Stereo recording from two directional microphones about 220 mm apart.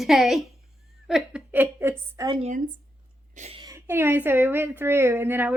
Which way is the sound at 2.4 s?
35° right (ahead or behind).